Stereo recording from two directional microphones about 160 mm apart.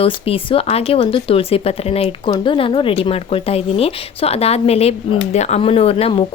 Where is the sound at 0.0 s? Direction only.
35° left (ahead or behind).